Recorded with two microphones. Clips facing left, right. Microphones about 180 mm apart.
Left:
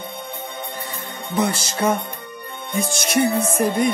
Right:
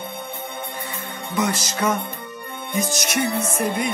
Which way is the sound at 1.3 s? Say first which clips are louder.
Left 2 dB; 30° left (ahead or behind).